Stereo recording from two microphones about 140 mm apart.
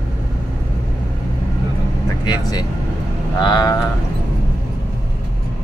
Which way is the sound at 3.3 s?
30° left (ahead or behind).